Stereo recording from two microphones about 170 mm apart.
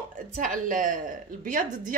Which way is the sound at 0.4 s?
50° right (ahead or behind).